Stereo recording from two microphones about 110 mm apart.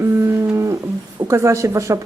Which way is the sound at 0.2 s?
25° right (ahead or behind).